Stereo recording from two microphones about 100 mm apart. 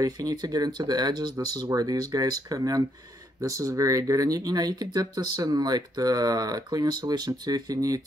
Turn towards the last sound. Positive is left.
turn(degrees=-40)  # may be behind; listen again after turning